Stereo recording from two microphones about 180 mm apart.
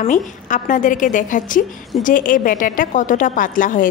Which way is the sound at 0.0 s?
45° left (ahead or behind).